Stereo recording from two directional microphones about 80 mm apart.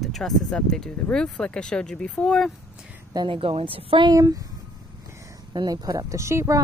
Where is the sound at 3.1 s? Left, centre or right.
Right.